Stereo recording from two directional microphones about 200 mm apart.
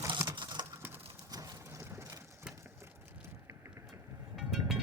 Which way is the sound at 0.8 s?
10° right (ahead or behind).